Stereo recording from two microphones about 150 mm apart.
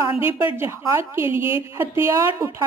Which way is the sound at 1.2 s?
35° left (ahead or behind).